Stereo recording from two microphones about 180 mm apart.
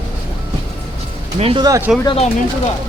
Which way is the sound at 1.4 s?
30° right (ahead or behind).